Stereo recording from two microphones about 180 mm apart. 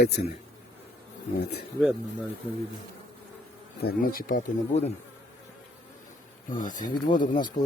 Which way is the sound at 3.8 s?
55° left (ahead or behind).